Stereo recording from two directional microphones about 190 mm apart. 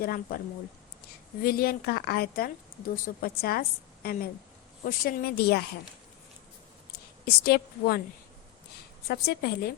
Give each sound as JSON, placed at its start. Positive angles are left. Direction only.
{"t": 0.0, "sound": "a woman's voice", "side_deg": 50}
{"t": 1.4, "sound": "a woman's voice", "side_deg": 50}
{"t": 7.3, "sound": "a woman's voice", "side_deg": 55}
{"t": 9.0, "sound": "a woman's voice", "side_deg": 55}